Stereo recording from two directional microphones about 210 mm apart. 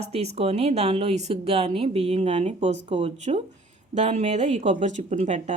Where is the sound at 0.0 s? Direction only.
30° right (ahead or behind).